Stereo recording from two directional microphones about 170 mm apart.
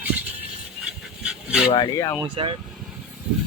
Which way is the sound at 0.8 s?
5° right (ahead or behind).